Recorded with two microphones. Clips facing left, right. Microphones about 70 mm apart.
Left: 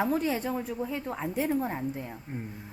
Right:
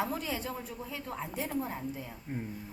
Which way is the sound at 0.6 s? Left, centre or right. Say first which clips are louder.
Left 7 dB; left.